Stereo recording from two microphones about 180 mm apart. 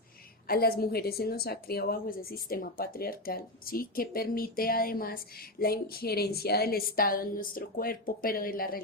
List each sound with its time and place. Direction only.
0.4 s a woman's voice: 55° left (ahead or behind)